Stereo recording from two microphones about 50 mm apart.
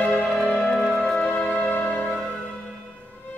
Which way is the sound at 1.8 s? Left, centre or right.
Left.